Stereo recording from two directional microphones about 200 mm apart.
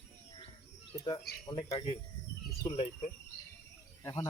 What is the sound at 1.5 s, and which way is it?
Speech, 25° left (ahead or behind).